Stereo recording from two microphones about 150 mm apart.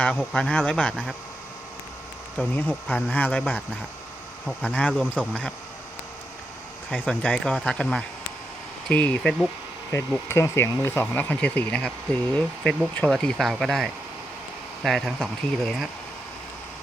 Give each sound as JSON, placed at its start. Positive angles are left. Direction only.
{"t": 0.0, "sound": "speech", "side_deg": 5}
{"t": 2.6, "sound": "speech", "side_deg": 10}
{"t": 6.9, "sound": "speech", "side_deg": 5}